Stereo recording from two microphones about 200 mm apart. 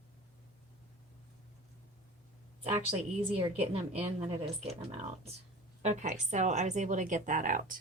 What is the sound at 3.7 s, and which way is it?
Speech, 30° right (ahead or behind).